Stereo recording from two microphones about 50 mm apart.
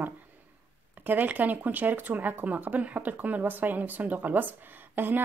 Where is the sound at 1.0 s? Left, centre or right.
Right.